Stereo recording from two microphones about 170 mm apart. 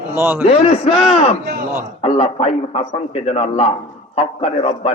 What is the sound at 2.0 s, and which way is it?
A man's voice, 35° left (ahead or behind).